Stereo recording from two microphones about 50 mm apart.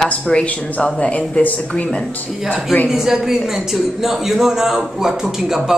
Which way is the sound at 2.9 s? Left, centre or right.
Centre.